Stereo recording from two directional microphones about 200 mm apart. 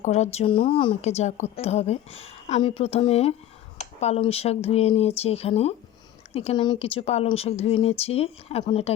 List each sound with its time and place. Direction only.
0.0 s a woman's voice: 35° left (ahead or behind)